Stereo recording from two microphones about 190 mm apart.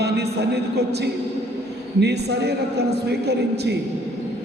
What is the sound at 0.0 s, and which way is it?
A man's voice, 60° right (ahead or behind).